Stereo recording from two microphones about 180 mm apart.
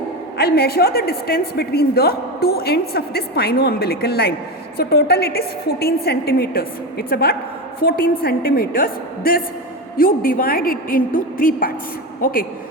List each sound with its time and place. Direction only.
0.3 s a woman's voice: 65° left (ahead or behind)